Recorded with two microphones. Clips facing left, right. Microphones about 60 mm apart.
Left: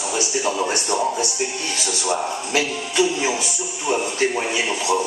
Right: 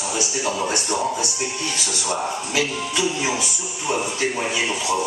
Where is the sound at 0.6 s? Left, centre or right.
Left.